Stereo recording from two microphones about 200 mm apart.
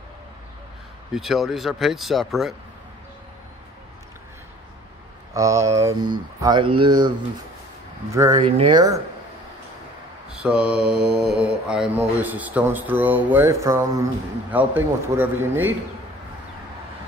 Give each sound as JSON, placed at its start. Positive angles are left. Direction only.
{"t": 1.1, "sound": "speech", "side_deg": 0}
{"t": 5.3, "sound": "speech", "side_deg": -15}
{"t": 10.3, "sound": "speech", "side_deg": -5}